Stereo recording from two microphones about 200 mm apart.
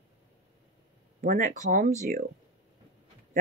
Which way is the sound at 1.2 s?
40° right (ahead or behind).